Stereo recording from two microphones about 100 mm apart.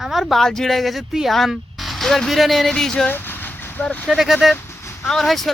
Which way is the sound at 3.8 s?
10° left (ahead or behind).